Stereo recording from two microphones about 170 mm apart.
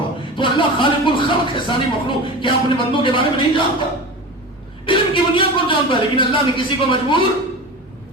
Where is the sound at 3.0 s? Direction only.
30° left (ahead or behind).